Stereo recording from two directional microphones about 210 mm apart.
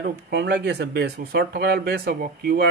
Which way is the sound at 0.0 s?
50° right (ahead or behind).